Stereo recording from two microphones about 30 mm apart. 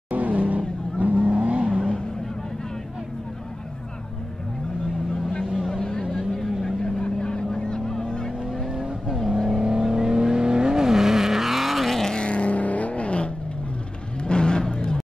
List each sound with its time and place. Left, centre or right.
0.1 s vehicle: right
5.6 s vehicle: centre
6.6 s vehicle: left
8.6 s vehicle: right
9.0 s vehicle: centre
9.6 s vehicle: right; by 11.9 s centre
12.2 s vehicle: left
14.2 s vehicle: left